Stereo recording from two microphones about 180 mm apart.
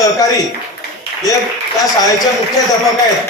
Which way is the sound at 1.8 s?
20° left (ahead or behind).